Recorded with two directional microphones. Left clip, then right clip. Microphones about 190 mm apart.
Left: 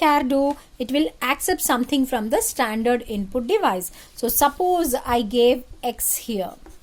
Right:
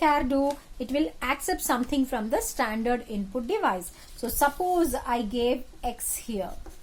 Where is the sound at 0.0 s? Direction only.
50° left (ahead or behind).